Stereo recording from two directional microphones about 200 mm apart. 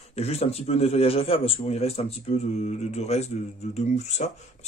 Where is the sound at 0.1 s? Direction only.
30° left (ahead or behind).